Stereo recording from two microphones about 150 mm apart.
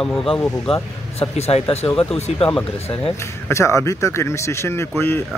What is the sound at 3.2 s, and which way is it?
Speech, 20° left (ahead or behind).